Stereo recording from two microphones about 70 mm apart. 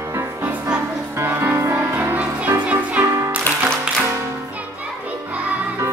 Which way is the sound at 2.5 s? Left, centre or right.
Centre.